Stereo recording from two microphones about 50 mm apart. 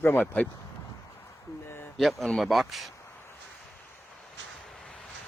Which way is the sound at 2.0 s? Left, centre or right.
Centre.